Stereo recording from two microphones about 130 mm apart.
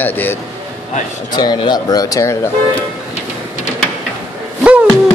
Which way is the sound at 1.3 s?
35° left (ahead or behind).